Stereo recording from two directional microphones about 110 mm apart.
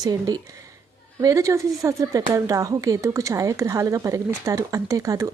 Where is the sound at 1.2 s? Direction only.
30° right (ahead or behind).